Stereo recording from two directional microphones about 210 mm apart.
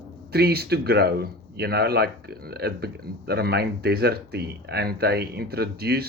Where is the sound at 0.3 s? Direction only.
50° right (ahead or behind).